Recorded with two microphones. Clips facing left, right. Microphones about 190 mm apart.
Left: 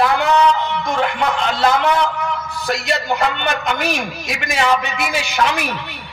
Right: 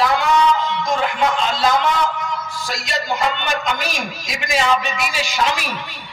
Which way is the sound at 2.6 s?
60° left (ahead or behind).